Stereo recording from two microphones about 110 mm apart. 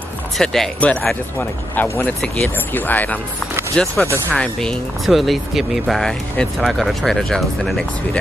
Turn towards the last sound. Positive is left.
turn(degrees=5)  # may be behind; listen again after turning